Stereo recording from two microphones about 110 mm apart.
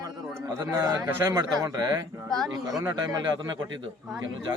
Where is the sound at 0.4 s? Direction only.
30° right (ahead or behind).